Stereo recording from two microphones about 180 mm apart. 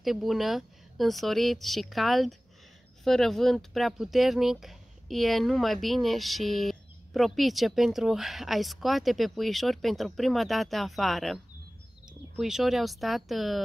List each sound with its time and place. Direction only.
0.0 s speech: centre (ahead or behind)